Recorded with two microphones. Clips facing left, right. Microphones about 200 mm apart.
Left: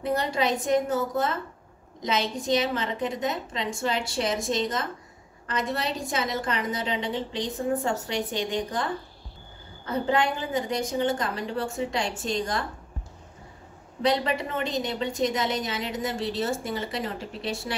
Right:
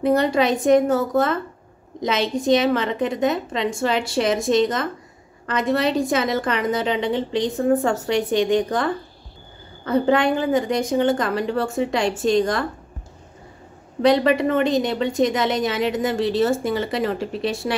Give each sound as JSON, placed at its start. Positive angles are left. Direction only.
{"t": 0.0, "sound": "a woman's voice", "side_deg": -70}
{"t": 14.0, "sound": "a woman's voice", "side_deg": -75}